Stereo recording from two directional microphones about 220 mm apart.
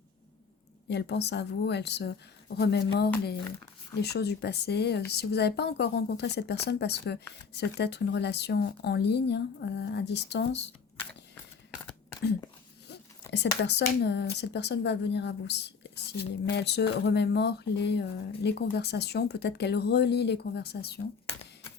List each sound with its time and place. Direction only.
0.9 s speech: 50° left (ahead or behind)
12.9 s a sound: 50° left (ahead or behind)
13.7 s speech: 50° left (ahead or behind)